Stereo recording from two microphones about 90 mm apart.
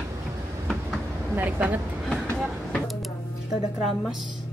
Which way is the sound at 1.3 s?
20° right (ahead or behind).